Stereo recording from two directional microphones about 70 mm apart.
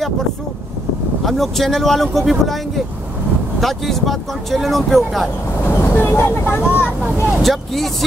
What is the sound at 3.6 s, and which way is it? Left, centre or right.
Speech, centre.